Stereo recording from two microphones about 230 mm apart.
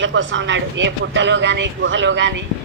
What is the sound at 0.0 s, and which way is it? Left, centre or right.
A woman's voice, right.